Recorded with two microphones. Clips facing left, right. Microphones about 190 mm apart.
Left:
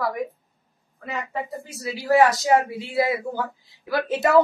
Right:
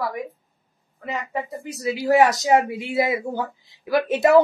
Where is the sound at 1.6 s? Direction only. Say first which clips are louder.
Right 4 dB; 20° right (ahead or behind).